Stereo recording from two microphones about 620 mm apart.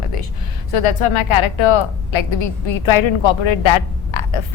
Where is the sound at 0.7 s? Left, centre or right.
Left.